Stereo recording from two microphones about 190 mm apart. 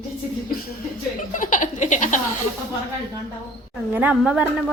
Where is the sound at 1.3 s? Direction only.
45° left (ahead or behind).